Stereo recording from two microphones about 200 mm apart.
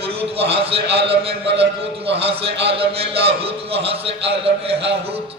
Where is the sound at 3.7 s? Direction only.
30° right (ahead or behind).